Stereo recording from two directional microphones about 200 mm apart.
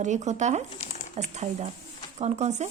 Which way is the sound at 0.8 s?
35° left (ahead or behind).